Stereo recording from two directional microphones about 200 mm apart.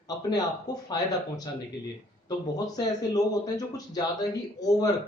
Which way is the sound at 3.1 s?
20° left (ahead or behind).